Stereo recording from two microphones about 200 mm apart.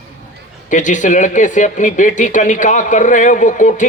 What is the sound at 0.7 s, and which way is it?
Speech, 40° left (ahead or behind).